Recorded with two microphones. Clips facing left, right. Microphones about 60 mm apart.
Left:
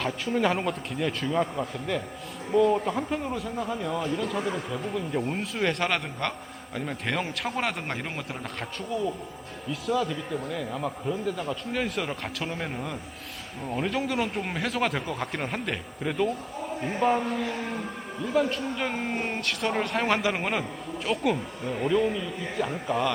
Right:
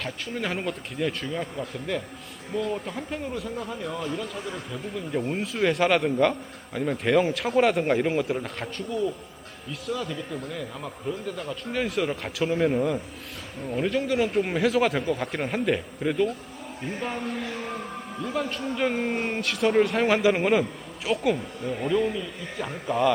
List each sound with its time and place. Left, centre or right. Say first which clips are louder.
0.0 s a man's voice: left 5 dB; centre